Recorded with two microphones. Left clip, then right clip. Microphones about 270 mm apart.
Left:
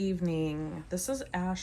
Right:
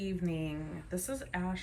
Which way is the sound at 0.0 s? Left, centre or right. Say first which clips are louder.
Left 6 dB; centre.